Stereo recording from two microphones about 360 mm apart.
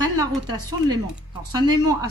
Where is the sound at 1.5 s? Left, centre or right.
Centre.